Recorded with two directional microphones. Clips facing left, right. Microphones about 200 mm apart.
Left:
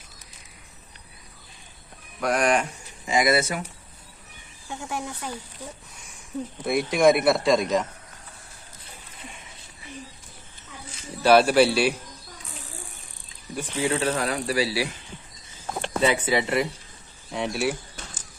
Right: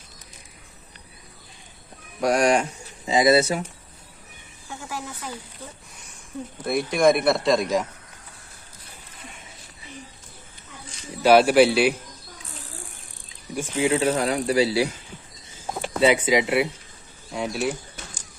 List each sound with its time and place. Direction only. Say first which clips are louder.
2.2 s speech: right 3 dB; 25° right (ahead or behind)
4.7 s speech: left 2 dB; 20° left (ahead or behind)
6.7 s speech: even; 5° left (ahead or behind)
11.2 s a man's voice: right 2 dB; 10° right (ahead or behind)
13.6 s speech: right 3 dB; 5° right (ahead or behind)
13.8 s a man's voice: right 3 dB; 15° right (ahead or behind)
15.6 s speech: right 3 dB; 10° right (ahead or behind)
17.3 s speech: even; centre (ahead or behind)